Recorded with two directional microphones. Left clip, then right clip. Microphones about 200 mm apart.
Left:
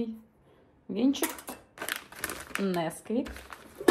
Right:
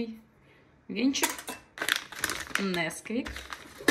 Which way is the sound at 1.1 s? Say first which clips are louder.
Right 3 dB; 5° left (ahead or behind).